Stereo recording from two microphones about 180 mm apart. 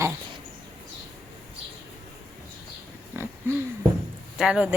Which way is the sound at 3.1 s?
10° right (ahead or behind).